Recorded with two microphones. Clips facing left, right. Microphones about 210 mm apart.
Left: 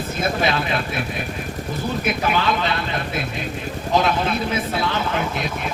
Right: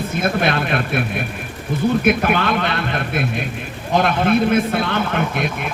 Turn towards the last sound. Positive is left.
turn(degrees=-60)  # may be behind; listen again after turning